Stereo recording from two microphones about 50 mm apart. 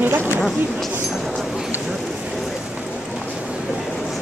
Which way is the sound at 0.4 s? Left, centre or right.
Centre.